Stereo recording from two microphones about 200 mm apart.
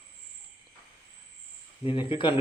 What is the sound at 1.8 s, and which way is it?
Speech, 25° left (ahead or behind).